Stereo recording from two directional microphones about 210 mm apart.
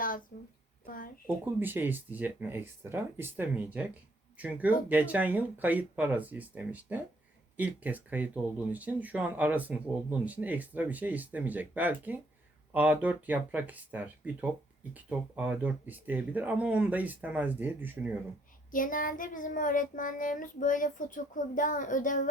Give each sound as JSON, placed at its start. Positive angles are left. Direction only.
{"t": 0.3, "sound": "child singing", "side_deg": 40}
{"t": 0.9, "sound": "a woman's voice", "side_deg": 40}
{"t": 1.5, "sound": "speech", "side_deg": -10}
{"t": 18.7, "sound": "child singing", "side_deg": 40}